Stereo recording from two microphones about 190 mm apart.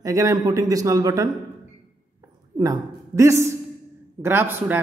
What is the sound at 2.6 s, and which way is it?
A woman's voice, 15° right (ahead or behind).